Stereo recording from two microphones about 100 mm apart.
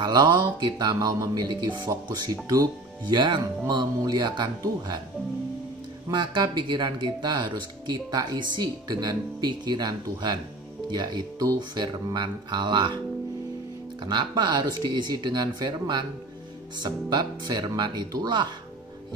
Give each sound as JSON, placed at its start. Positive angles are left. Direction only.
{"t": 0.0, "sound": "speech", "side_deg": -50}
{"t": 6.0, "sound": "speech", "side_deg": -45}
{"t": 14.0, "sound": "speech", "side_deg": -45}